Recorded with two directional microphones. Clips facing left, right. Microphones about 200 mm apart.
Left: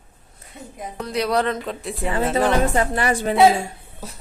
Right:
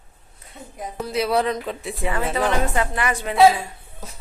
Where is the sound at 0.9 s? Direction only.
5° right (ahead or behind).